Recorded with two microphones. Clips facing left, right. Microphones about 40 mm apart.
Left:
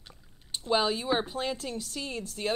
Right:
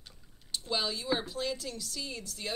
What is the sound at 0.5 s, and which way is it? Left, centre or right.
A woman's voice, left.